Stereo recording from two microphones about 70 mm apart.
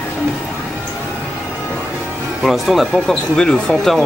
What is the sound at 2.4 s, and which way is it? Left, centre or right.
Speech, centre.